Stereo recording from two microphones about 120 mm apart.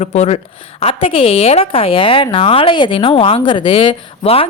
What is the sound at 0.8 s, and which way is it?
A woman's voice, 50° left (ahead or behind).